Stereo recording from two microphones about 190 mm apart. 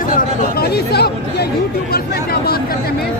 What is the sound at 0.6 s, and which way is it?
Speech, 55° left (ahead or behind).